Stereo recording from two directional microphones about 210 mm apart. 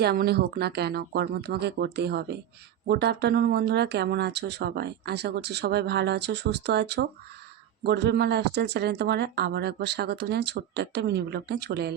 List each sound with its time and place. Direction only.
0.0 s speech: 50° right (ahead or behind)